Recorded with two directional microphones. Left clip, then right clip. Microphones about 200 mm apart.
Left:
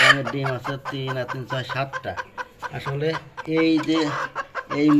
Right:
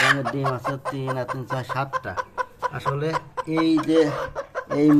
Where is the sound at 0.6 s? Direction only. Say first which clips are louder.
Right 2 dB; 45° right (ahead or behind).